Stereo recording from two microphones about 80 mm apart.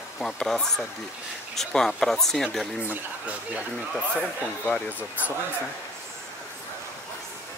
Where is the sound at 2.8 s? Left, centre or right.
Centre.